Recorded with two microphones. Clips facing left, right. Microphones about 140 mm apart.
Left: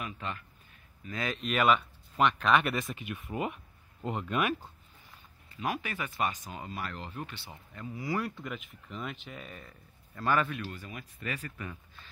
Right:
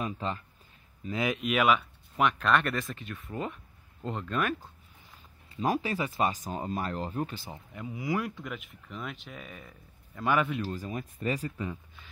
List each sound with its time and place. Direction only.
0.0 s speech: 30° right (ahead or behind)
1.0 s speech: 15° right (ahead or behind); by 4.6 s 10° left (ahead or behind)
5.6 s speech: 35° right (ahead or behind)
7.7 s speech: 15° right (ahead or behind)
8.5 s speech: centre (ahead or behind)
10.5 s speech: 35° right (ahead or behind)
11.4 s speech: 20° right (ahead or behind)